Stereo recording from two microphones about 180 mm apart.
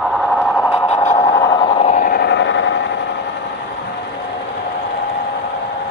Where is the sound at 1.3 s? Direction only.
20° left (ahead or behind).